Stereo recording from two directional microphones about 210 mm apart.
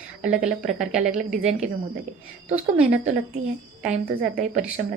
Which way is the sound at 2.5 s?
5° right (ahead or behind).